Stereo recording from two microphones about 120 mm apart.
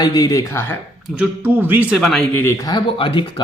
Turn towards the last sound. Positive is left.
turn(degrees=45)  # may be behind; listen again after turning